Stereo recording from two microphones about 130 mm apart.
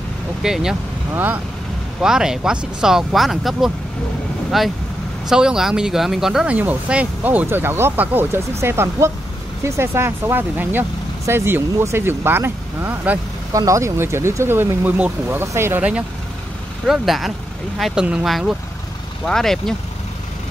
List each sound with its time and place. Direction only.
0.4 s speech: 5° right (ahead or behind)
13.5 s speech: 25° right (ahead or behind)
16.8 s speech: centre (ahead or behind)